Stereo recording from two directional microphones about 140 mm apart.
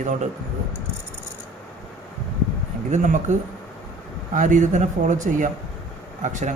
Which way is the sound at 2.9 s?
60° right (ahead or behind).